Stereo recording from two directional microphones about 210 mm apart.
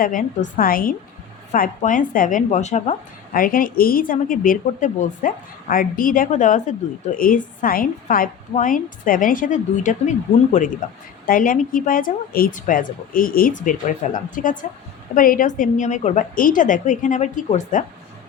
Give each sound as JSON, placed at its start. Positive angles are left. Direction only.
{"t": 0.0, "sound": "a woman's voice", "side_deg": 40}